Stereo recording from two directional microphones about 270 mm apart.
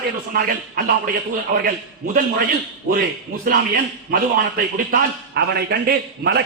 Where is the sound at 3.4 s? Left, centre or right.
Right.